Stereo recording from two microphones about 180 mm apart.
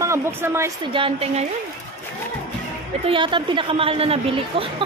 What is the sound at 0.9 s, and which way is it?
Speech, 30° right (ahead or behind).